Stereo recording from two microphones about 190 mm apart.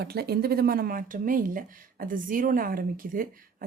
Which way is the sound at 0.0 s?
55° right (ahead or behind).